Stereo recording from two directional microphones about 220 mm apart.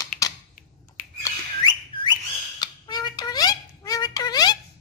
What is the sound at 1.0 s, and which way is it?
Squawk, 35° left (ahead or behind).